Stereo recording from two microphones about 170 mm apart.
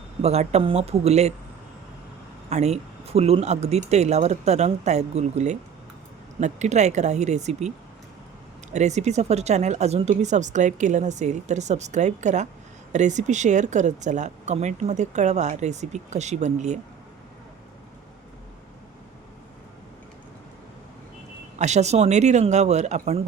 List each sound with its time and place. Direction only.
0.2 s speech: 40° right (ahead or behind)
2.5 s speech: 40° right (ahead or behind)
8.7 s speech: 40° right (ahead or behind)
21.6 s speech: 40° right (ahead or behind)